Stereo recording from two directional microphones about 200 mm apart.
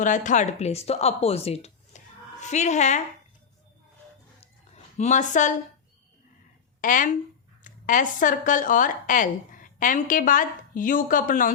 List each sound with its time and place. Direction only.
0.0 s speech: 40° left (ahead or behind)
4.9 s speech: 35° left (ahead or behind)
6.8 s speech: 40° left (ahead or behind)